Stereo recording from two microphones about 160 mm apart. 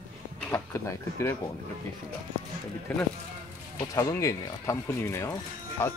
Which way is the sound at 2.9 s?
5° left (ahead or behind).